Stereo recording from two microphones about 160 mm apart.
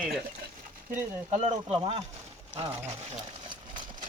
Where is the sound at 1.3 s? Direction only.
45° right (ahead or behind).